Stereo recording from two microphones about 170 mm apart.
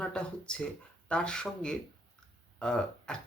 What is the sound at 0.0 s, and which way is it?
Speech, 5° left (ahead or behind).